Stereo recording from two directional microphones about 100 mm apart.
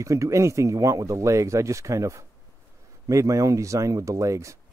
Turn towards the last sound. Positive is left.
turn(degrees=-30)  # may be behind; listen again after turning